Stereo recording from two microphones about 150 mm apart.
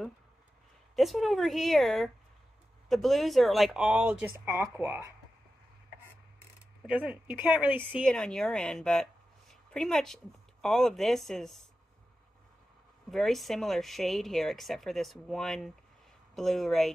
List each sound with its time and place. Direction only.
0.9 s speech: centre (ahead or behind)
4.5 s speech: 20° right (ahead or behind)
6.9 s speech: 10° right (ahead or behind)
8.0 s a woman's voice: 5° left (ahead or behind)
13.1 s speech: centre (ahead or behind)